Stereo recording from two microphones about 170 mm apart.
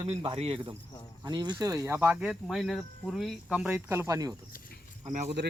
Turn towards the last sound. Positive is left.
turn(degrees=-40)  # may be behind; listen again after turning